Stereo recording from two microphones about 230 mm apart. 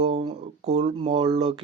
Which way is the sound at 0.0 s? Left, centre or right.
Right.